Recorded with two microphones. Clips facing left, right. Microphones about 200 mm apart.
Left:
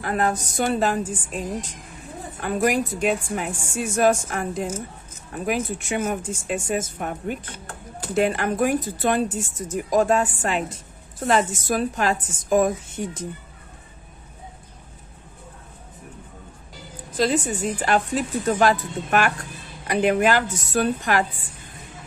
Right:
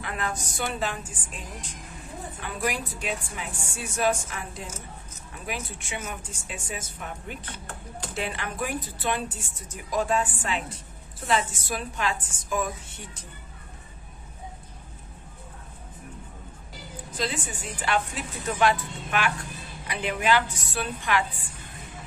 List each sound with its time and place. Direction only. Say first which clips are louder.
0.0 s a woman's voice: left 9 dB; 45° left (ahead or behind)
17.2 s a woman's voice: left 10 dB; 40° left (ahead or behind)